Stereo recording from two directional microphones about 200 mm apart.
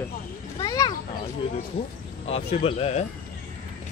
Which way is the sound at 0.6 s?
20° left (ahead or behind).